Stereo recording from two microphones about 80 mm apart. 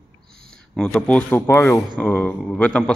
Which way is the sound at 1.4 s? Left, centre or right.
Left.